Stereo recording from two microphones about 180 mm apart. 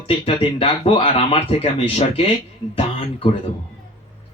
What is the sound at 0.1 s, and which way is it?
Speech, 30° left (ahead or behind).